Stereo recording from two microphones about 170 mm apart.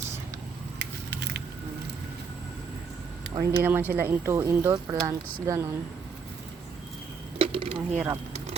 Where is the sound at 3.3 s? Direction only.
30° right (ahead or behind).